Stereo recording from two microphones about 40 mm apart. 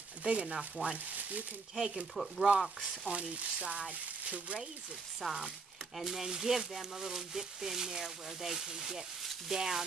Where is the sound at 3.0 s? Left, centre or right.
Right.